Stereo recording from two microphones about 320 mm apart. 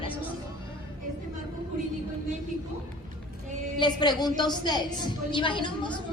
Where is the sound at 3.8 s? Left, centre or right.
Centre.